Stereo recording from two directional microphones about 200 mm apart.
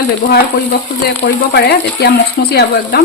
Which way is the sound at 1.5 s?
55° left (ahead or behind).